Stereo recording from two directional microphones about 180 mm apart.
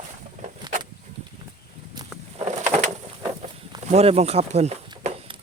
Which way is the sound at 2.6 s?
40° right (ahead or behind).